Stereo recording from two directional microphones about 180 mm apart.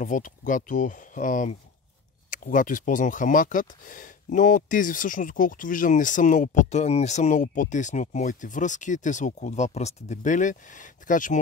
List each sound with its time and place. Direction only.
0.0 s speech: 45° left (ahead or behind)